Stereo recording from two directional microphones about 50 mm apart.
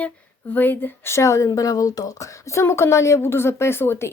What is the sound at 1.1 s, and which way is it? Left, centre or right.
A woman's voice, left.